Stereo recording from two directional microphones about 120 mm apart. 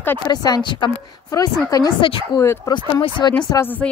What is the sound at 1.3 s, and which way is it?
Speech, 30° left (ahead or behind).